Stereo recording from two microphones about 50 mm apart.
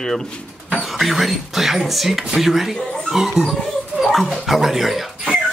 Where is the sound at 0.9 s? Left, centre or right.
Centre.